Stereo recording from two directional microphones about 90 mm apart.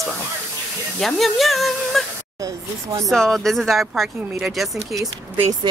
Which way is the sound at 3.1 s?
5° left (ahead or behind).